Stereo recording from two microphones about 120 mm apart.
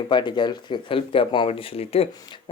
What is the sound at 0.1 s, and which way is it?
Speech, 40° left (ahead or behind).